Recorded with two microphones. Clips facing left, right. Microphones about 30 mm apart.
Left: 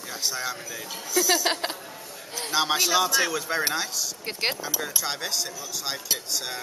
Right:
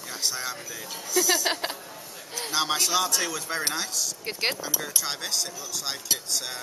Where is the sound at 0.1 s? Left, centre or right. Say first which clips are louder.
Left 1 dB; centre.